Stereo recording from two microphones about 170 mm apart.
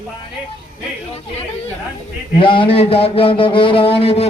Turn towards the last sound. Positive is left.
turn(degrees=35)  # may be behind; listen again after turning